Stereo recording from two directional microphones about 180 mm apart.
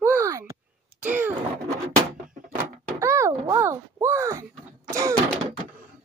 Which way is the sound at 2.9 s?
15° right (ahead or behind).